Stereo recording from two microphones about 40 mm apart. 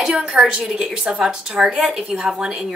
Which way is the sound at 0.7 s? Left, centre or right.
Centre.